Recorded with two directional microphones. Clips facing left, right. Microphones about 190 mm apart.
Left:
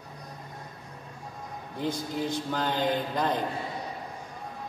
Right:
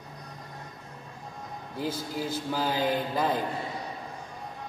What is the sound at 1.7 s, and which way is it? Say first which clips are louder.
A man's voice: left 1 dB; 5° right (ahead or behind).